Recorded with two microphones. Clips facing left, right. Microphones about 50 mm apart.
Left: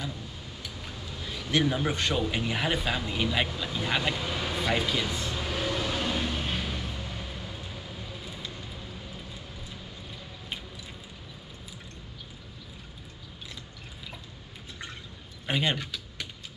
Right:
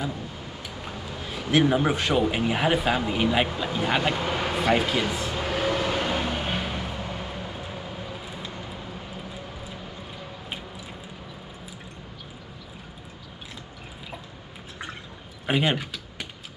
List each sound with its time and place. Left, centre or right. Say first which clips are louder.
0.6 s a sound: right 4 dB; right
2.1 s speech: right 6 dB; right
4.1 s vehicle: right 5 dB; right
4.6 s speech: right 5 dB; right
5.3 s vehicle: right 5 dB; right
15.4 s computer keyboard: right 4 dB; centre